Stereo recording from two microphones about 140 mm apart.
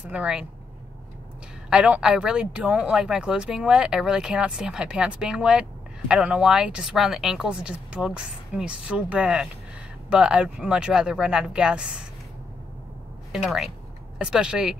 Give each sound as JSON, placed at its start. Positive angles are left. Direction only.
{"t": 0.0, "sound": "speech", "side_deg": -10}
{"t": 1.7, "sound": "speech", "side_deg": -5}
{"t": 13.3, "sound": "speech", "side_deg": 0}